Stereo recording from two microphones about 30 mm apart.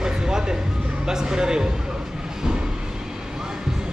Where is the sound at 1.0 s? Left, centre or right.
Right.